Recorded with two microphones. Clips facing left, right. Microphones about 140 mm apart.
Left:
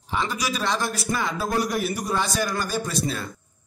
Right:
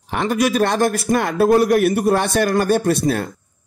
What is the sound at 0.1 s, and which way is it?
A man's voice, 60° right (ahead or behind).